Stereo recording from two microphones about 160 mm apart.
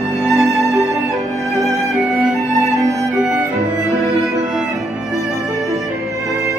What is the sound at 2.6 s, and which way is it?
Music, 20° left (ahead or behind).